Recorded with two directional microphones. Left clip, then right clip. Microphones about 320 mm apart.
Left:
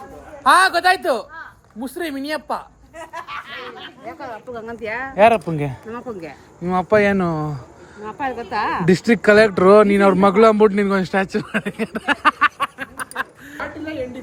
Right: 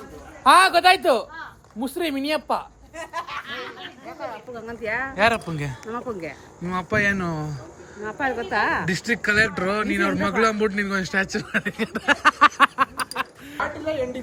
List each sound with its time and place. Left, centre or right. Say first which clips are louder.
0.4 s speech: left 1 dB; centre
4.5 s speech: left 1 dB; centre
8.9 s speech: left 8 dB; centre
12.5 s a sound: right 6 dB; right
13.2 s chuckle: left 3 dB; centre
13.6 s speech: right 2 dB; right